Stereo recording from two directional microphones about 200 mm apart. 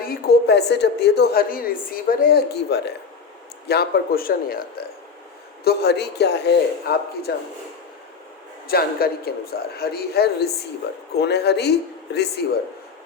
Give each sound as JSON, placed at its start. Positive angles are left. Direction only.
{"t": 0.0, "sound": "a woman's voice", "side_deg": 50}
{"t": 8.6, "sound": "a man's voice", "side_deg": 50}